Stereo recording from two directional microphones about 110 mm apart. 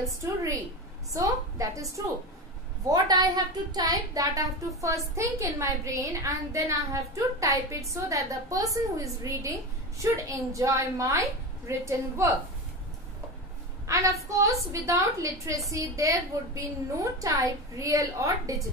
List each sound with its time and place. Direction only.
0.2 s a woman's voice: 30° right (ahead or behind)
2.9 s a woman's voice: 35° right (ahead or behind)
13.8 s a woman's voice: 30° right (ahead or behind)